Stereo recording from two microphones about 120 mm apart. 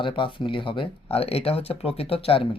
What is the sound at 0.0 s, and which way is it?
Speech, 45° left (ahead or behind).